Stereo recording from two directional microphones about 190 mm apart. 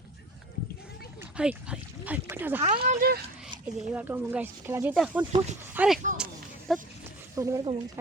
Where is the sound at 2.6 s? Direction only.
35° right (ahead or behind).